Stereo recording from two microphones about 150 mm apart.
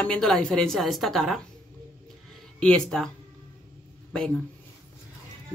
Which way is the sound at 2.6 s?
5° left (ahead or behind).